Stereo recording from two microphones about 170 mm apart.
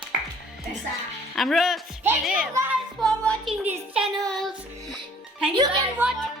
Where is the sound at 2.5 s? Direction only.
10° right (ahead or behind).